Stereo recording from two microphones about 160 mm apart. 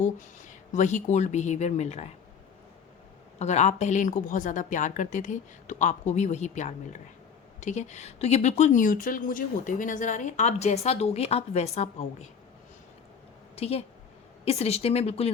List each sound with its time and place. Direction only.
0.7 s speech: 50° left (ahead or behind)
3.3 s speech: 45° left (ahead or behind)
13.6 s speech: 40° left (ahead or behind)